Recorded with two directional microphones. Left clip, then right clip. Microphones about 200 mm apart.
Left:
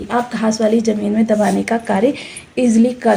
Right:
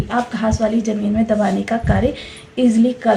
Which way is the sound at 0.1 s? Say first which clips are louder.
Left 2 dB; 35° left (ahead or behind).